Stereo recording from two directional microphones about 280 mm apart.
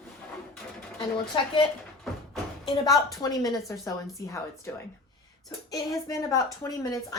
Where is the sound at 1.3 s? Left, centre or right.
Centre.